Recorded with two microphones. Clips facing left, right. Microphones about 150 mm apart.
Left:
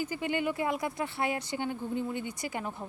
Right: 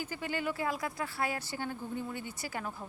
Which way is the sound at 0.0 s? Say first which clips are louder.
Left 5 dB; 15° left (ahead or behind).